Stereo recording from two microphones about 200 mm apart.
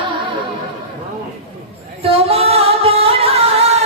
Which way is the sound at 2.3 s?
30° right (ahead or behind).